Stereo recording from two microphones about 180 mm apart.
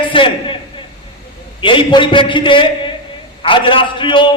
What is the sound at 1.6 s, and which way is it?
A man's voice, 25° left (ahead or behind).